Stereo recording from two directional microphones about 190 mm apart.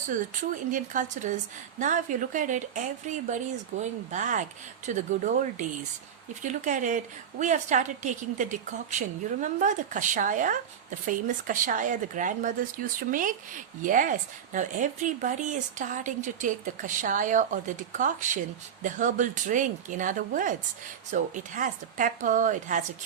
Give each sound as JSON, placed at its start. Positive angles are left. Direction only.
{"t": 0.1, "sound": "a woman's voice", "side_deg": -45}